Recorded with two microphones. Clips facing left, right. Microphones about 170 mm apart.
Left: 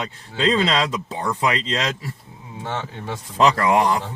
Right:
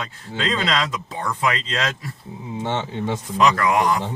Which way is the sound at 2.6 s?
20° right (ahead or behind).